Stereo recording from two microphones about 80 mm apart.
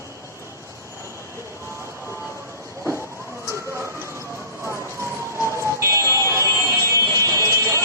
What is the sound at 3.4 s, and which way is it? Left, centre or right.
Emergency vehicle, right.